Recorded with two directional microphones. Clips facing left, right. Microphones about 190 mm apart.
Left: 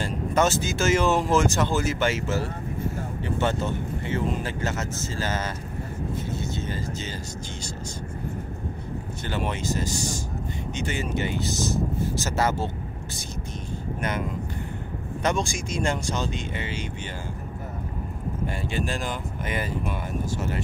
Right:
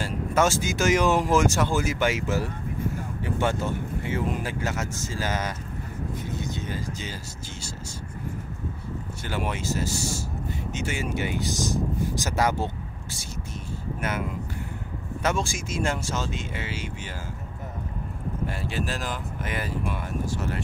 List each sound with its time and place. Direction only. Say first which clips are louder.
0.0 s speech: even; 10° right (ahead or behind)
6.3 s vehicle: left 1 dB; 15° right (ahead or behind)
9.2 s speech: left 1 dB; 10° right (ahead or behind)
15.2 s speech: left 1 dB; 5° right (ahead or behind)
18.7 s speech: left 2 dB; centre (ahead or behind)